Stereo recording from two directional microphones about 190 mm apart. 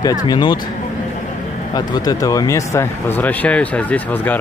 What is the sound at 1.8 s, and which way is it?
Speech, 20° left (ahead or behind).